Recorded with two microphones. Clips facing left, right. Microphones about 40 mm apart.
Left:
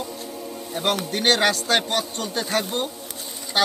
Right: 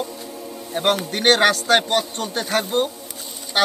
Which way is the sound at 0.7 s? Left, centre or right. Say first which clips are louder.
Right 4 dB; centre.